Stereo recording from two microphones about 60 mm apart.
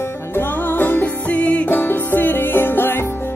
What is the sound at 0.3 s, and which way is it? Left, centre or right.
Music, left.